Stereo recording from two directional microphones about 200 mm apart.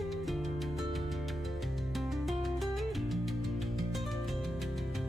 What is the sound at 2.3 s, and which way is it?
Music, centre (ahead or behind).